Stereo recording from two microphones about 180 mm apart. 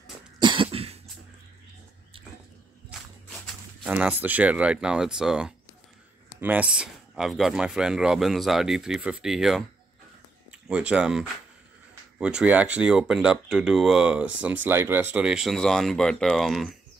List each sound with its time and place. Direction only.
0.4 s cough: 30° right (ahead or behind)
3.8 s speech: 10° right (ahead or behind)
10.7 s speech: 5° right (ahead or behind)